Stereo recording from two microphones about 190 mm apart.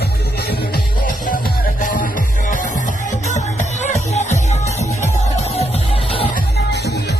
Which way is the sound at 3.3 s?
40° left (ahead or behind).